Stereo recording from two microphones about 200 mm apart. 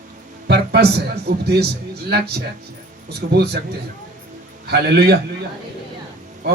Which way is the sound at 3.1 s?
55° right (ahead or behind).